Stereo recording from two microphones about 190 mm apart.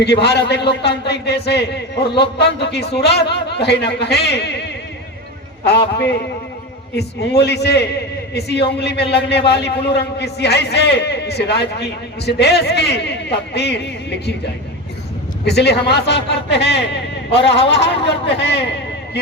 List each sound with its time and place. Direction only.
0.0 s a man's voice: 60° left (ahead or behind)
6.9 s a man's voice: 60° left (ahead or behind)
15.4 s a man's voice: 60° left (ahead or behind)